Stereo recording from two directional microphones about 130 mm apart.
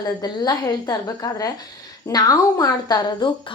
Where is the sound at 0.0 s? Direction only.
30° left (ahead or behind).